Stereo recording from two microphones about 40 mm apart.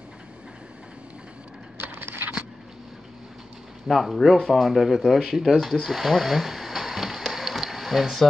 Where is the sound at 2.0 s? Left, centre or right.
Right.